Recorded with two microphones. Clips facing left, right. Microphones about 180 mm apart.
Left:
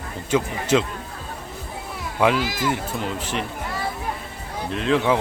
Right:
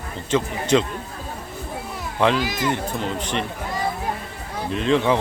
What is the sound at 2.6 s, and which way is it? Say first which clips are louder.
Speech: right 1 dB; 5° left (ahead or behind).